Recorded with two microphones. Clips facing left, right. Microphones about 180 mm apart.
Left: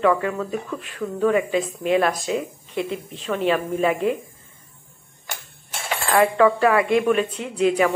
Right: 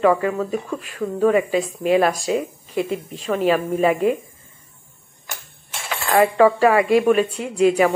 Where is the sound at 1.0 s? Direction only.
40° right (ahead or behind).